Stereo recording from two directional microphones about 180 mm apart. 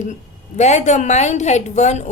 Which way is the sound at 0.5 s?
40° left (ahead or behind).